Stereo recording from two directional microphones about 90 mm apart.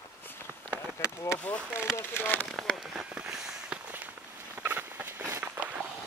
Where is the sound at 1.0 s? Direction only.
30° left (ahead or behind).